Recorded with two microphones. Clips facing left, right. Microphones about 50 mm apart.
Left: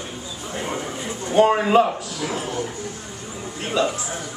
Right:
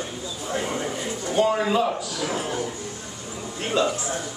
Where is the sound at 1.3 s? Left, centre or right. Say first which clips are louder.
Left 6 dB; left.